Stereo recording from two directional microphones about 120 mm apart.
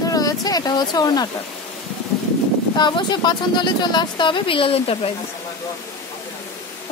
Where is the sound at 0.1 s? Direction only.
30° left (ahead or behind).